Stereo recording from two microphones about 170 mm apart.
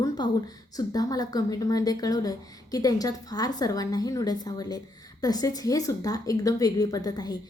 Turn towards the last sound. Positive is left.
turn(degrees=25)  # may be behind; listen again after turning